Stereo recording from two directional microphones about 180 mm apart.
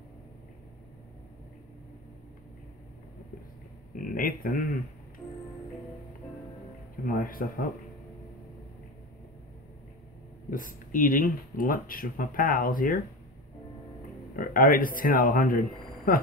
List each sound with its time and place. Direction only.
4.0 s speech: 50° left (ahead or behind)
7.1 s speech: 50° left (ahead or behind)
10.5 s speech: 50° left (ahead or behind)
14.3 s speech: 50° left (ahead or behind)